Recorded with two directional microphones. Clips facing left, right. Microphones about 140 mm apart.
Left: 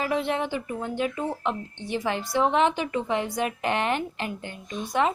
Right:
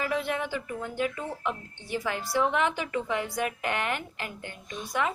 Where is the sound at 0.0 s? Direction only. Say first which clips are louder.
Left 3 dB; 25° left (ahead or behind).